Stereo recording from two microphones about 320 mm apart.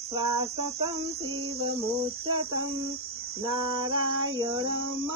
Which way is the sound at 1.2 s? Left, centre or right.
Right.